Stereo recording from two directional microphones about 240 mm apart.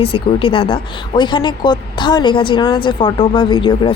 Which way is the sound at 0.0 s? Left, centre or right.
Left.